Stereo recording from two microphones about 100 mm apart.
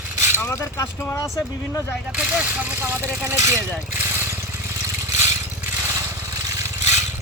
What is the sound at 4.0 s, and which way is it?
Rattle, 25° right (ahead or behind).